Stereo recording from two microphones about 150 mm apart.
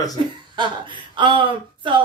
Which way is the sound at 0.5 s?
30° right (ahead or behind).